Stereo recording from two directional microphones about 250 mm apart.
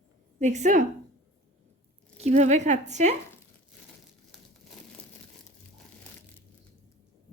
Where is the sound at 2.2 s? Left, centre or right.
Right.